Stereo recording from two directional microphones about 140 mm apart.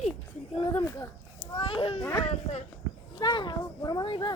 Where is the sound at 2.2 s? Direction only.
50° left (ahead or behind).